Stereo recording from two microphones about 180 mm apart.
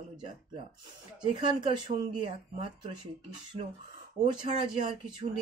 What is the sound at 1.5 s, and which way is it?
Speech, 25° right (ahead or behind).